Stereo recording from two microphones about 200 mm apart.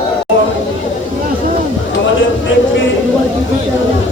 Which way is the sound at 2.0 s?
70° left (ahead or behind).